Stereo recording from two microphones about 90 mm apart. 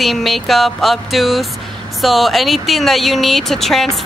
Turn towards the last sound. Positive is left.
turn(degrees=5)  # may be behind; listen again after turning